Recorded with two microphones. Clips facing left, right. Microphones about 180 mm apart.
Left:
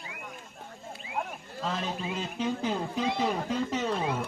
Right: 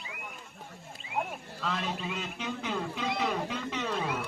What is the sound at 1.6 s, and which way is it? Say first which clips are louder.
Speech: left 2 dB; 35° left (ahead or behind).